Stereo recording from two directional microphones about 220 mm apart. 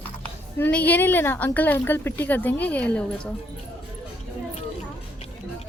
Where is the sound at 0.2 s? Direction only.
5° left (ahead or behind).